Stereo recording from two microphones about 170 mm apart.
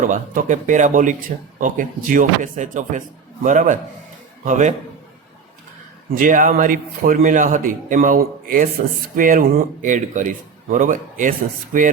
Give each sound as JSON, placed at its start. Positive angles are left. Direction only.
{"t": 0.0, "sound": "speech", "side_deg": -50}
{"t": 6.1, "sound": "speech", "side_deg": -55}